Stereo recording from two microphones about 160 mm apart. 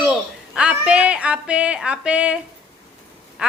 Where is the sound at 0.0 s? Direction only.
5° right (ahead or behind).